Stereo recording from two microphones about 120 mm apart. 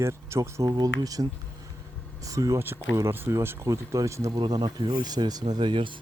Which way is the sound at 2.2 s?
30° right (ahead or behind).